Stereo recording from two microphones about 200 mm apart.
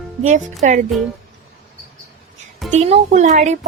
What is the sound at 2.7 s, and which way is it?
Speech, 35° right (ahead or behind).